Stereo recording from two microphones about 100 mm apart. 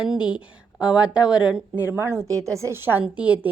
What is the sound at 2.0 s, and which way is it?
A woman's voice, 25° right (ahead or behind).